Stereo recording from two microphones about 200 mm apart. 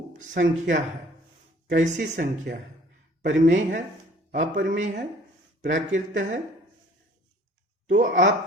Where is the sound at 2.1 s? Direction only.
40° right (ahead or behind).